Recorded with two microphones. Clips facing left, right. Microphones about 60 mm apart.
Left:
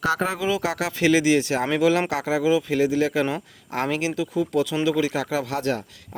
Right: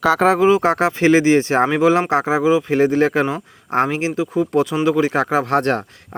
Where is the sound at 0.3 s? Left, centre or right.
Right.